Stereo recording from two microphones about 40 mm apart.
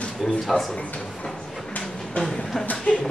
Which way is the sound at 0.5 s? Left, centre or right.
Left.